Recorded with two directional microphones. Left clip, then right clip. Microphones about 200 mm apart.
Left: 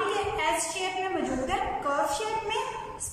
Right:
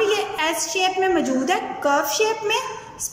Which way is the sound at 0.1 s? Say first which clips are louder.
Right 5 dB; 50° right (ahead or behind).